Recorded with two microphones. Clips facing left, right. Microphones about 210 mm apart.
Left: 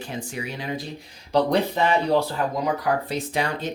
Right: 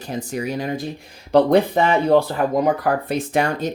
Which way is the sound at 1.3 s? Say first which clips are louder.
Right 6 dB; 55° right (ahead or behind).